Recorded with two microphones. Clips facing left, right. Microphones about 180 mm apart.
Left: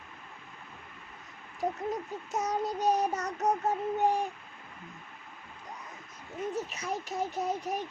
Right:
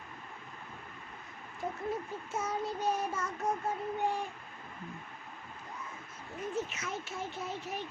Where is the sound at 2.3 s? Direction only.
40° left (ahead or behind).